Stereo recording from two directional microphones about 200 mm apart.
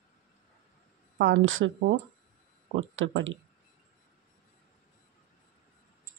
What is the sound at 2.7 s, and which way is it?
Speech, 75° right (ahead or behind).